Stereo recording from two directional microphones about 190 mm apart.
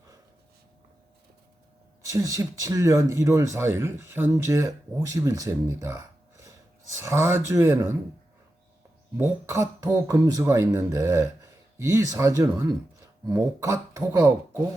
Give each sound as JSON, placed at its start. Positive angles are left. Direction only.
{"t": 2.0, "sound": "speech", "side_deg": -15}
{"t": 9.1, "sound": "speech", "side_deg": -15}